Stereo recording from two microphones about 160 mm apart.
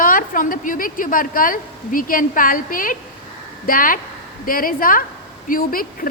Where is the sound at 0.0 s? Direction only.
55° left (ahead or behind).